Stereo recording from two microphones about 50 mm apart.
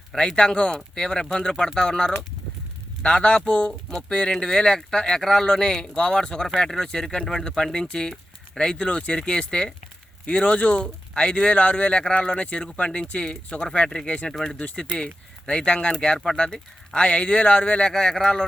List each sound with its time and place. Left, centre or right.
0.2 s speech: centre
14.6 s speech: left